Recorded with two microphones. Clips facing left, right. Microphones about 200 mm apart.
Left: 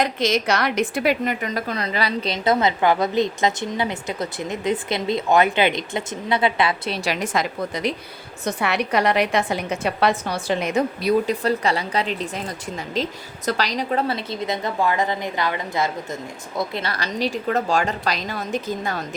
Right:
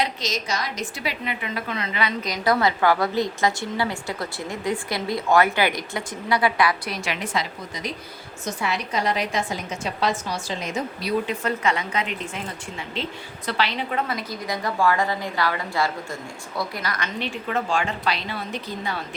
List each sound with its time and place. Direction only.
0.0 s a woman's voice: 55° left (ahead or behind); by 7.4 s 40° left (ahead or behind)
7.7 s a woman's voice: 65° left (ahead or behind)
11.3 s a woman's voice: 35° left (ahead or behind)